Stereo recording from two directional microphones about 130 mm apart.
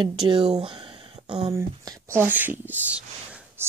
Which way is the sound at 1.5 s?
20° right (ahead or behind).